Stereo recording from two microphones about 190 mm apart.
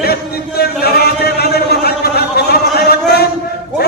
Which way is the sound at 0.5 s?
55° left (ahead or behind).